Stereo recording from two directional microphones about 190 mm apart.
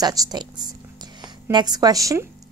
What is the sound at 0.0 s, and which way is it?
A woman's voice, 20° right (ahead or behind).